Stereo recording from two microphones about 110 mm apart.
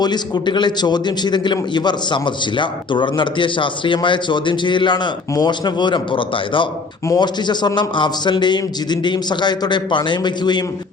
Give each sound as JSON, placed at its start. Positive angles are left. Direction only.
{"t": 0.0, "sound": "a man's voice", "side_deg": 40}